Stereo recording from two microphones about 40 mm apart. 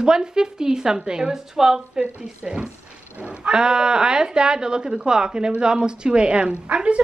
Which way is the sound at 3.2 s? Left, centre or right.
Right.